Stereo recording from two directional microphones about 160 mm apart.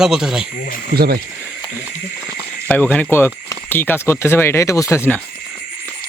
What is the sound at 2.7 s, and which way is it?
Speech, 10° left (ahead or behind).